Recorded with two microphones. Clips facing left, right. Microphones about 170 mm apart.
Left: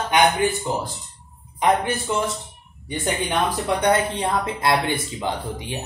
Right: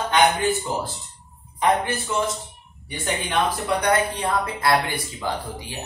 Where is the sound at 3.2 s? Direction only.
25° left (ahead or behind).